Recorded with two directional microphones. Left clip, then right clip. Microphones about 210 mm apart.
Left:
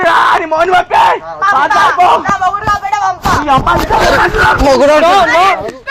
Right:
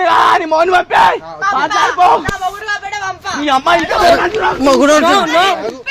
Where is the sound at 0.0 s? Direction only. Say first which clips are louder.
Left 1 dB; 50° right (ahead or behind).